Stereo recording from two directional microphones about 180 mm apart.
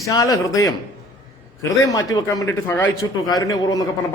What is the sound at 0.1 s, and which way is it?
Speech, 20° left (ahead or behind).